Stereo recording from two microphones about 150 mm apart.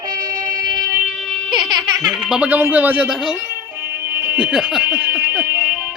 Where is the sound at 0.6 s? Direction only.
25° right (ahead or behind).